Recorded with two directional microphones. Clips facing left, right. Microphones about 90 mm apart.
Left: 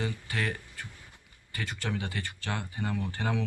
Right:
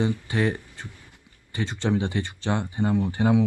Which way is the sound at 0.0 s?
25° right (ahead or behind).